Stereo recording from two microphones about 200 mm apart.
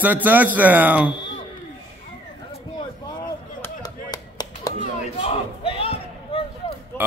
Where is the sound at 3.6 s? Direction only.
20° left (ahead or behind).